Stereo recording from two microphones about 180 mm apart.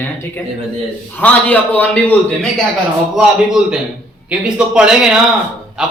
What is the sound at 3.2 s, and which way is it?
A man's voice, 5° right (ahead or behind).